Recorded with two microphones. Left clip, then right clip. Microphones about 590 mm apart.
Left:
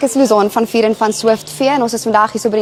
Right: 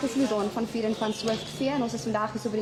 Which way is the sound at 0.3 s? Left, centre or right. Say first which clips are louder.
Left 17 dB; left.